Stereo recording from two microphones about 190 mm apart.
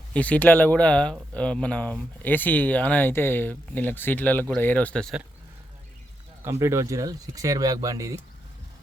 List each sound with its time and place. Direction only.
0.1 s speech: 5° left (ahead or behind)
6.4 s speech: 15° right (ahead or behind)